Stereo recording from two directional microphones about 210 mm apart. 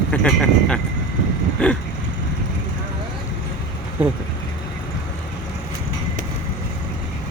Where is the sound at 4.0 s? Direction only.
10° right (ahead or behind).